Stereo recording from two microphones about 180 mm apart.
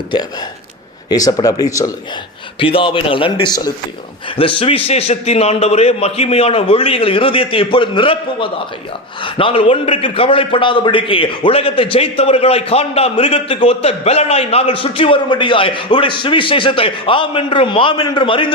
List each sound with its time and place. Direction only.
1.1 s a man's voice: 20° left (ahead or behind)
2.7 s a man's voice: 30° left (ahead or behind)